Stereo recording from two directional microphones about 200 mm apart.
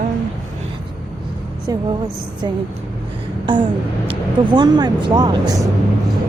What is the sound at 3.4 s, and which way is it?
Speech, 25° right (ahead or behind).